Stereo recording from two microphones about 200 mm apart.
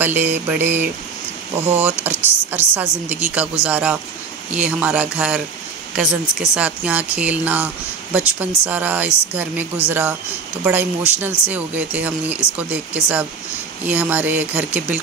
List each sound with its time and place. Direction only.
0.0 s speech: 10° right (ahead or behind)